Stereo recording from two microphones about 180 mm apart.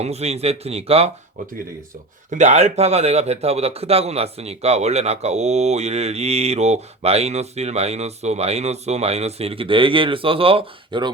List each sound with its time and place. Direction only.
0.0 s a man's voice: 35° right (ahead or behind)
2.3 s a man's voice: 40° right (ahead or behind)